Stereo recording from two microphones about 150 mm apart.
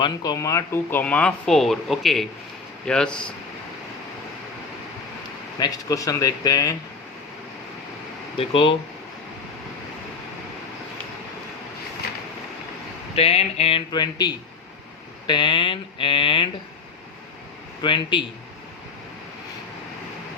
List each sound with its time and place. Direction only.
0.0 s speech: 25° left (ahead or behind); by 3.3 s 5° left (ahead or behind)
5.5 s speech: 25° left (ahead or behind)
8.4 s speech: 35° left (ahead or behind)
13.1 s speech: 40° left (ahead or behind)
17.8 s speech: 35° left (ahead or behind)